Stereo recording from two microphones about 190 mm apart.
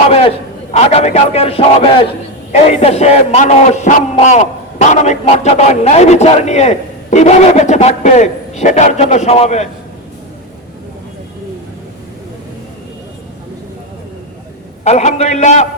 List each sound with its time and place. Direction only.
0.1 s a man's voice: 30° left (ahead or behind)
14.8 s a man's voice: 35° left (ahead or behind)